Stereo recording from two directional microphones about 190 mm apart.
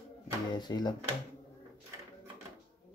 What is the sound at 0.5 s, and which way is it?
Speech, 20° left (ahead or behind).